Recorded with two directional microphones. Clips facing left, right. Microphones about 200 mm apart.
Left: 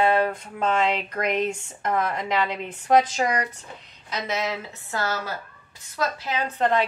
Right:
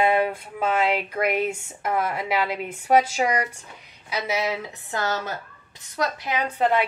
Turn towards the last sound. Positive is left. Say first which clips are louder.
# right 1 dB
turn(degrees=-10)  # may be behind; listen again after turning